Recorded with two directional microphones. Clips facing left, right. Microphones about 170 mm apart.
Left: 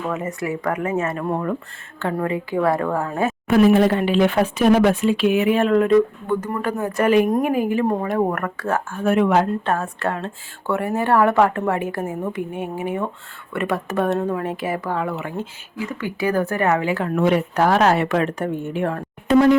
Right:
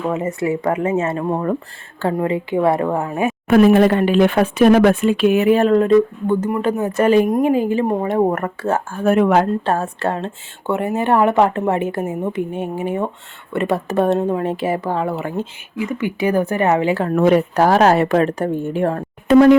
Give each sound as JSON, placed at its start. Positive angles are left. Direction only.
{"t": 0.1, "sound": "speech", "side_deg": -25}
{"t": 3.4, "sound": "speech", "side_deg": -60}
{"t": 9.0, "sound": "speech", "side_deg": -45}
{"t": 9.6, "sound": "speech", "side_deg": -30}
{"t": 15.8, "sound": "a woman's voice", "side_deg": -15}
{"t": 19.3, "sound": "a sound", "side_deg": -65}